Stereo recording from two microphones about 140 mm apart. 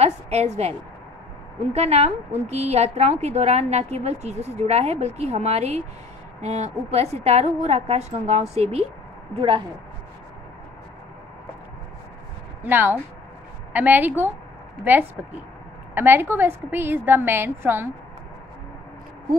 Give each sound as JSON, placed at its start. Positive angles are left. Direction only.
{"t": 0.0, "sound": "a sound", "side_deg": -50}
{"t": 1.7, "sound": "a woman's voice", "side_deg": -50}
{"t": 12.6, "sound": "a woman's voice", "side_deg": -15}
{"t": 15.9, "sound": "a woman's voice", "side_deg": -15}